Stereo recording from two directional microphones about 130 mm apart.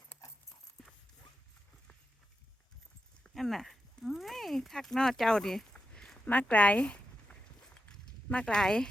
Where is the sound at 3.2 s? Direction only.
Centre (ahead or behind).